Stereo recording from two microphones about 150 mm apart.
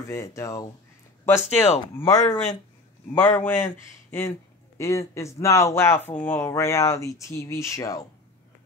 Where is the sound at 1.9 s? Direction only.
25° left (ahead or behind).